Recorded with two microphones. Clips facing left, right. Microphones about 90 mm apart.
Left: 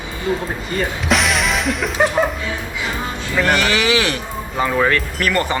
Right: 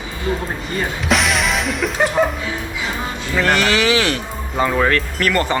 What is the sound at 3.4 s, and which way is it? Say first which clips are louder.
Speech: right 1 dB; 15° left (ahead or behind).